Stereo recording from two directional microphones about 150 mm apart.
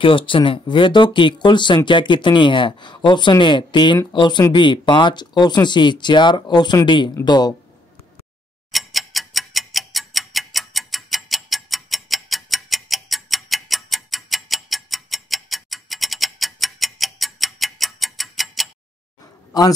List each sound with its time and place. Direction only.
0.0 s speech: 35° left (ahead or behind)
8.7 s clock: centre (ahead or behind)